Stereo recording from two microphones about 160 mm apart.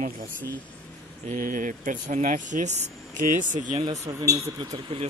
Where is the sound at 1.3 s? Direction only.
60° right (ahead or behind).